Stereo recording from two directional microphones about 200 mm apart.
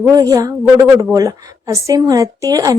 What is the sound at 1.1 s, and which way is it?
Speech, 15° right (ahead or behind).